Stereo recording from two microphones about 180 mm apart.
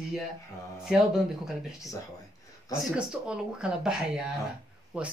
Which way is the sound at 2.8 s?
5° right (ahead or behind).